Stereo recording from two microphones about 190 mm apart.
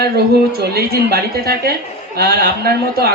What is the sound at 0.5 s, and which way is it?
A man's voice, 55° right (ahead or behind).